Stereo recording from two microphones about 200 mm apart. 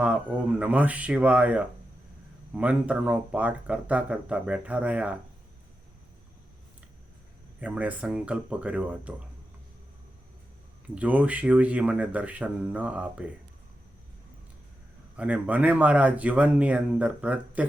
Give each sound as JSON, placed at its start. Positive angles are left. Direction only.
{"t": 0.0, "sound": "speech", "side_deg": -5}
{"t": 7.6, "sound": "speech", "side_deg": -5}
{"t": 10.9, "sound": "speech", "side_deg": -5}
{"t": 15.1, "sound": "speech", "side_deg": -5}